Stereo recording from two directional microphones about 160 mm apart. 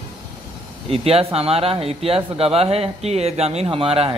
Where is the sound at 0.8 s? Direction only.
40° right (ahead or behind).